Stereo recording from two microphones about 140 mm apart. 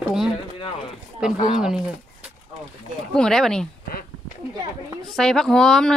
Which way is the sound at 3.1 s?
5° left (ahead or behind).